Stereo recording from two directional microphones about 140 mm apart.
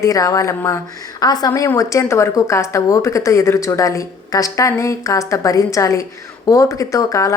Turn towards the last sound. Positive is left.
turn(degrees=25)  # may be behind; listen again after turning